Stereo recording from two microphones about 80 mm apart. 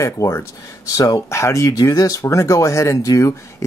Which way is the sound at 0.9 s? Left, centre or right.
Left.